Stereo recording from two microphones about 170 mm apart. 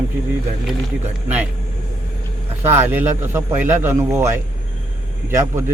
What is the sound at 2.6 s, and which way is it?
A man's voice, 10° right (ahead or behind).